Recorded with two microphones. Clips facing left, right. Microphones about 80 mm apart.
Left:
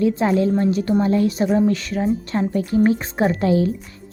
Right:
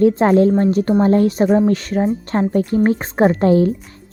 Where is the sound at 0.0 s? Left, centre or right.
Right.